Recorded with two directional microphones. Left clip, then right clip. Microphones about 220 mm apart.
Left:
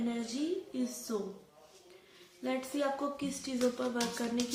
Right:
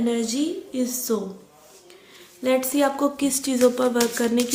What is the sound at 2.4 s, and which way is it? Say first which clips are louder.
A woman's voice: right 13 dB; 50° right (ahead or behind).